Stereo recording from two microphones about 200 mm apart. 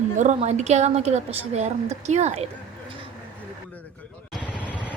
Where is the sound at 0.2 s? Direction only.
35° right (ahead or behind).